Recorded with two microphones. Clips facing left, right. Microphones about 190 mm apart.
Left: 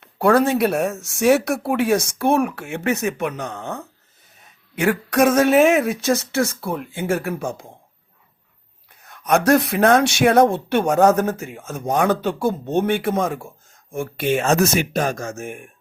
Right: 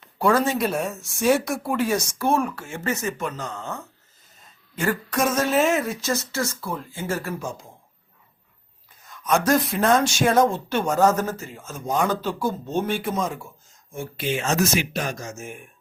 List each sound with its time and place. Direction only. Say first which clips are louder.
0.0 s speech: left 4 dB; 60° left (ahead or behind)
8.9 s speech: left 4 dB; 65° left (ahead or behind)